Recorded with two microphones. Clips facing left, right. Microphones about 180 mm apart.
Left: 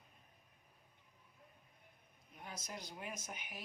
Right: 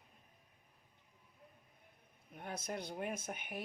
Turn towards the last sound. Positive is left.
turn(degrees=-55)  # may be behind; listen again after turning